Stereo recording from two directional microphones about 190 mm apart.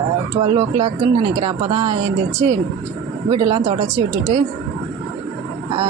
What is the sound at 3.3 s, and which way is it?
Speech, 25° right (ahead or behind).